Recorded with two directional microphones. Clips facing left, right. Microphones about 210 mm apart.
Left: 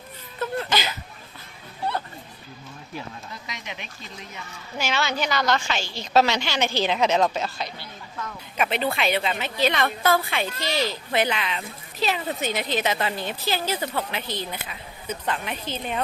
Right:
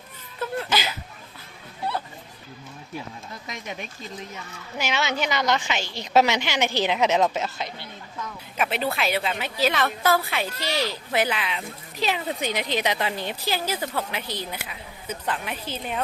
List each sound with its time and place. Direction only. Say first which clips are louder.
0.3 s a sound: left 1 dB; 5° right (ahead or behind)
3.4 s speech: right 6 dB; 45° right (ahead or behind)
4.8 s a woman's voice: even; 20° right (ahead or behind)
8.5 s a woman's voice: left 1 dB; 5° right (ahead or behind)